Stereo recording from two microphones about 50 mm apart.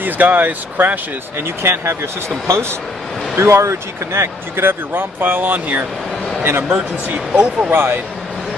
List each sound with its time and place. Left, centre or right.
0.0 s speech: right
1.6 s speech: right
7.7 s speech: right